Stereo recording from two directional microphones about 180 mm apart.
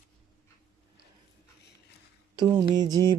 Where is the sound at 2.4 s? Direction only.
25° right (ahead or behind).